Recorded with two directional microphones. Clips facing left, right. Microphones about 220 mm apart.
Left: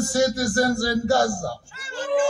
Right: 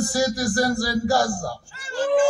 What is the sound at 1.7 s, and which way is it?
Speech, 40° right (ahead or behind).